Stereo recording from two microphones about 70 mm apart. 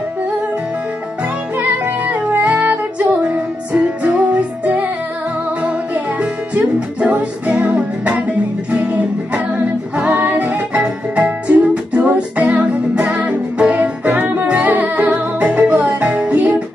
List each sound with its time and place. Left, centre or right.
1.6 s music: right